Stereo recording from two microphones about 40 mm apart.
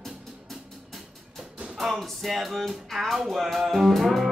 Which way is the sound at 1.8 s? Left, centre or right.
Centre.